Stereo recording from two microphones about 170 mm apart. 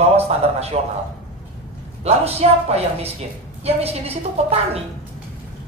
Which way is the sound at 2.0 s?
35° right (ahead or behind).